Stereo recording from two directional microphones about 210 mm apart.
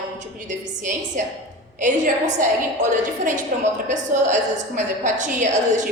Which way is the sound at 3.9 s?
35° right (ahead or behind).